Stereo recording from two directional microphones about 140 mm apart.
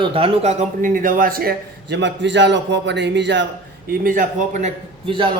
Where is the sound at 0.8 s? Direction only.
75° right (ahead or behind); by 1.5 s 90° right.